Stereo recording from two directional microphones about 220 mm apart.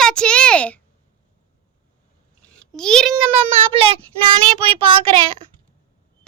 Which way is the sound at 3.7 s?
25° right (ahead or behind).